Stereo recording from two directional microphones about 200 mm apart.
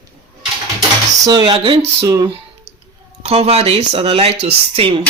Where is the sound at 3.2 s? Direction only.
30° right (ahead or behind).